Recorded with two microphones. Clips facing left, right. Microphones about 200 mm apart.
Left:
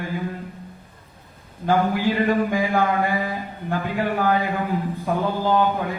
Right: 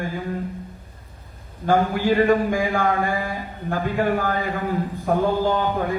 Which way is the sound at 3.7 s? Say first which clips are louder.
Right 2 dB; 45° right (ahead or behind).